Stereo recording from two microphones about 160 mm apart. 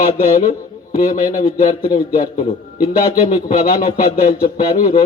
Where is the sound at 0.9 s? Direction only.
45° left (ahead or behind).